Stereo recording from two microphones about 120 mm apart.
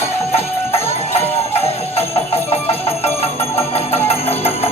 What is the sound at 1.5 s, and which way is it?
Music, 55° left (ahead or behind).